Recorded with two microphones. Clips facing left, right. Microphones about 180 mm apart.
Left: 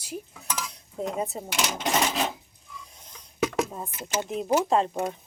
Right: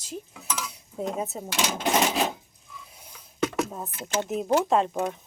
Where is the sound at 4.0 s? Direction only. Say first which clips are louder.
Right 2 dB; 10° left (ahead or behind).